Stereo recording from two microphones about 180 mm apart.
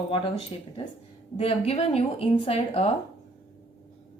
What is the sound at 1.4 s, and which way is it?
Speech, 35° left (ahead or behind).